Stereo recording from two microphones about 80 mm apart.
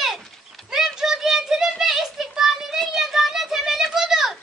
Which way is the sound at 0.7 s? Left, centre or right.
Centre.